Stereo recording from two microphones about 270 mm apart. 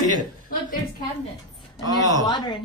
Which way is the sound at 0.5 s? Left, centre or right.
Left.